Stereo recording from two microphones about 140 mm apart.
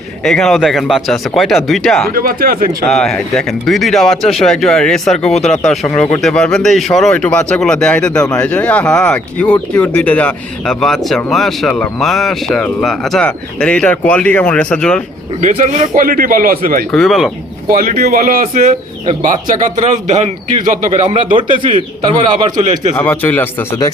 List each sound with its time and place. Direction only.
0.3 s speech: centre (ahead or behind)
2.1 s speech: 90° right
2.8 s speech: 5° left (ahead or behind)
5.3 s speech: 50° left (ahead or behind)
5.6 s speech: 5° left (ahead or behind)
15.4 s a man's voice: 60° right (ahead or behind); by 16.8 s 90° right
16.9 s speech: centre (ahead or behind)
17.7 s speech: 90° right
19.2 s a man's voice: 65° right (ahead or behind)
21.2 s speech: 35° right (ahead or behind)
23.0 s speech: 15° left (ahead or behind)